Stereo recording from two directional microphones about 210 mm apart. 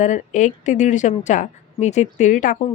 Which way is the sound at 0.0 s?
35° left (ahead or behind).